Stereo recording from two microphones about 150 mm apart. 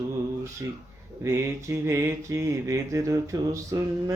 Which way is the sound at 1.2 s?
20° right (ahead or behind).